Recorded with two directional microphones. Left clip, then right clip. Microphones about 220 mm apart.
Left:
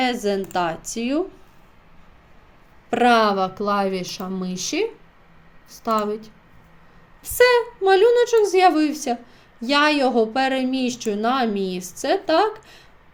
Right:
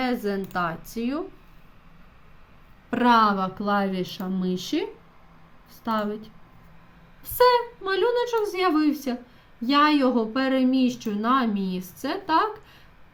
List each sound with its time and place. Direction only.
0.0 s speech: 5° left (ahead or behind)
2.9 s a woman's voice: 10° left (ahead or behind)
7.2 s a woman's voice: 5° left (ahead or behind)